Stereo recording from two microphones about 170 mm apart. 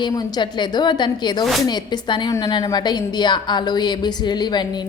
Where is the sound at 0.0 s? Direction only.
25° left (ahead or behind).